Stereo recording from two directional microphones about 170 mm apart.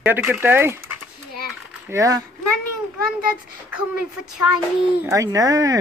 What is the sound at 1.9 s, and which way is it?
Speech, 20° right (ahead or behind).